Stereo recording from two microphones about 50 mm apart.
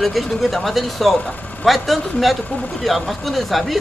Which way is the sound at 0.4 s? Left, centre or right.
Centre.